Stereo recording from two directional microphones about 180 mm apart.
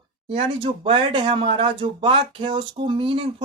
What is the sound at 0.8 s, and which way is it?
Speech, 30° right (ahead or behind).